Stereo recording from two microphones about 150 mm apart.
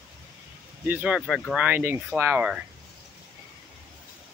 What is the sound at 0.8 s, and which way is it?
Speech, 10° right (ahead or behind).